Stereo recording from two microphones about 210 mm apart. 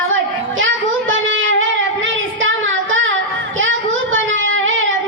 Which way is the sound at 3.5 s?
65° right (ahead or behind).